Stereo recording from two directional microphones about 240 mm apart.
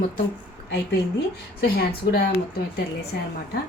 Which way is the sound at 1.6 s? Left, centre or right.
Left.